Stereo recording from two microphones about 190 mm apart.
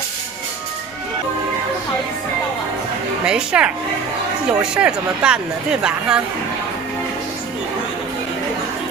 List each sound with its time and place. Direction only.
3.3 s speech: 5° right (ahead or behind)